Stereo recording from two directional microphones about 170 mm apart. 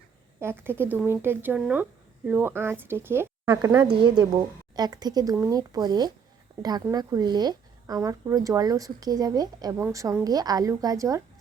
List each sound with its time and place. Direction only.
0.3 s speech: 15° right (ahead or behind)